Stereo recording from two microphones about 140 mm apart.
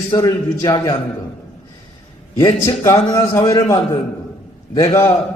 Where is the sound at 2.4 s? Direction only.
25° left (ahead or behind).